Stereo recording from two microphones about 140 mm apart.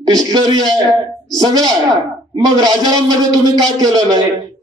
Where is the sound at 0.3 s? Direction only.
30° right (ahead or behind).